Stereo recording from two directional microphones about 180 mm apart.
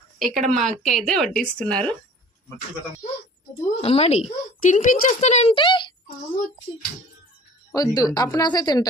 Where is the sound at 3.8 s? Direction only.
35° left (ahead or behind).